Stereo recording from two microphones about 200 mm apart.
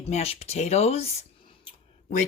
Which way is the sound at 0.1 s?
30° left (ahead or behind).